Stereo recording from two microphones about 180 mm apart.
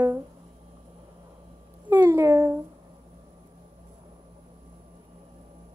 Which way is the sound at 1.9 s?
15° right (ahead or behind).